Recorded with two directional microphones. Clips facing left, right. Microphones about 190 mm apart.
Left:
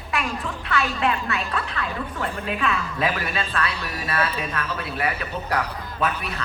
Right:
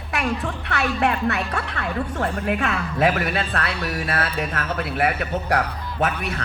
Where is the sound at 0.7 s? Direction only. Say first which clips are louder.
Right 1 dB; 65° right (ahead or behind).